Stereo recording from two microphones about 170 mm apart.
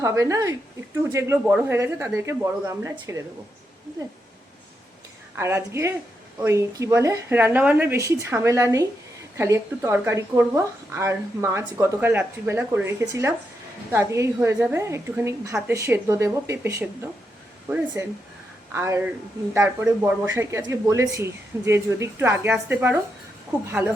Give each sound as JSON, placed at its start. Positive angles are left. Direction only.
{"t": 0.0, "sound": "a woman's voice", "side_deg": -20}
{"t": 5.4, "sound": "a woman's voice", "side_deg": -15}